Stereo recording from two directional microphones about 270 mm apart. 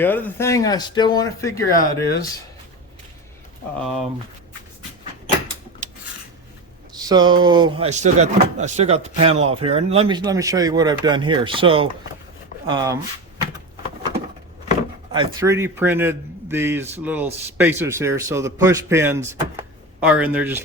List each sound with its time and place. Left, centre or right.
0.0 s speech: centre
3.8 s speech: centre
5.8 s scissors: right
7.1 s speech: centre
15.1 s speech: centre